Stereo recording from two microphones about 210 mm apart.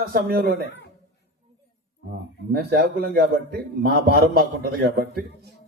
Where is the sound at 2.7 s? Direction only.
50° right (ahead or behind).